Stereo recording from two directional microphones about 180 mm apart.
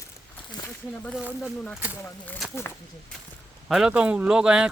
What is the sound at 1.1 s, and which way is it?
Speech, 5° right (ahead or behind).